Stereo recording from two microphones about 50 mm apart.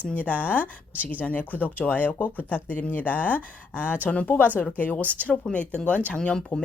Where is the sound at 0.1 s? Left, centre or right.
Left.